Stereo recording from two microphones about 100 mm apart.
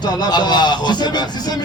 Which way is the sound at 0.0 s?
45° left (ahead or behind).